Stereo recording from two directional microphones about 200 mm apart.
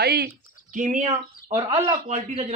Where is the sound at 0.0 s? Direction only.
50° right (ahead or behind).